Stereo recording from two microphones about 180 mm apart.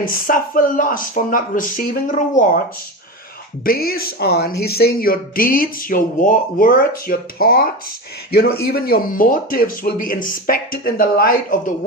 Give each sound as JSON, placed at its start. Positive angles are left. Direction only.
{"t": 0.0, "sound": "speech", "side_deg": 50}
{"t": 3.6, "sound": "speech", "side_deg": 55}